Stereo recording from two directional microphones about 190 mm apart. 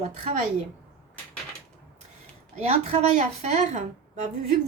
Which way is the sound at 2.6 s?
35° right (ahead or behind).